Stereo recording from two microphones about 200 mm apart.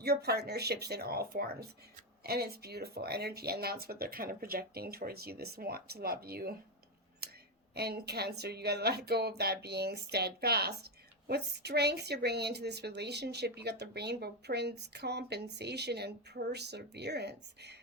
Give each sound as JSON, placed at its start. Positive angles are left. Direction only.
{"t": 0.0, "sound": "speech", "side_deg": -55}
{"t": 7.2, "sound": "a sound", "side_deg": -50}
{"t": 7.8, "sound": "a woman's voice", "side_deg": -55}